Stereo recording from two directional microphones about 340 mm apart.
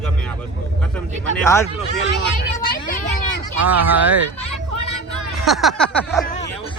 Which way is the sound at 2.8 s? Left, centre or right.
Left.